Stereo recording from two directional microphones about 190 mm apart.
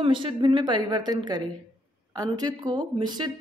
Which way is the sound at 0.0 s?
25° right (ahead or behind).